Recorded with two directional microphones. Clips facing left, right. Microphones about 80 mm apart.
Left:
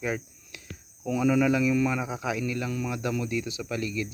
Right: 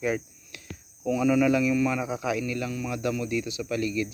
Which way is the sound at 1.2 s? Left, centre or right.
Centre.